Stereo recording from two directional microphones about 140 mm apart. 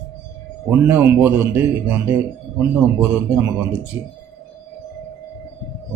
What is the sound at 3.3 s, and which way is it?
Speech, 10° right (ahead or behind).